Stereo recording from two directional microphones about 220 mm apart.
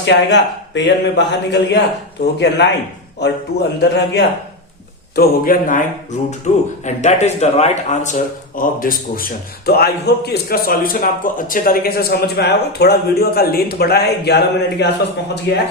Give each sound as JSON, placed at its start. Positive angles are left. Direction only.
{"t": 0.0, "sound": "speech", "side_deg": 55}
{"t": 5.1, "sound": "a man's voice", "side_deg": 40}